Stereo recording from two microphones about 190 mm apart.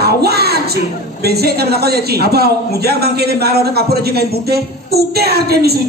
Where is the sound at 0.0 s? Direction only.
55° right (ahead or behind).